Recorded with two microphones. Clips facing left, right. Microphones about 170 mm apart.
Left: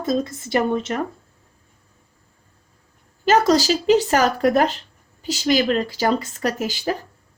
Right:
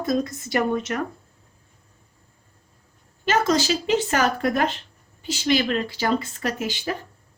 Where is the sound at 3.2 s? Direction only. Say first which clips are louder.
Left 5 dB; 40° left (ahead or behind).